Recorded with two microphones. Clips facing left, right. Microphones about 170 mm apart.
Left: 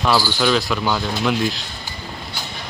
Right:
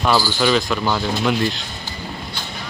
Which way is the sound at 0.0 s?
Centre (ahead or behind).